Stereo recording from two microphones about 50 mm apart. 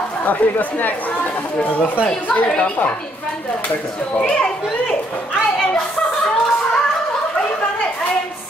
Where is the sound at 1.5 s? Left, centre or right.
Left.